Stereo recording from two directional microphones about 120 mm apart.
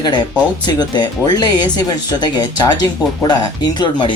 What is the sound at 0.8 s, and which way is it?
Speech, 35° left (ahead or behind).